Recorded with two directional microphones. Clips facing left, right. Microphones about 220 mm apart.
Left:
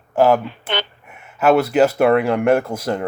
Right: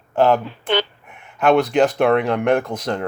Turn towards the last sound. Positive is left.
turn(degrees=5)  # may be behind; listen again after turning